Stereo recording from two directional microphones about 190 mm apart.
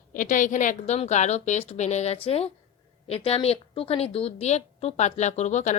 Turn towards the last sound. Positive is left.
turn(degrees=40)  # may be behind; listen again after turning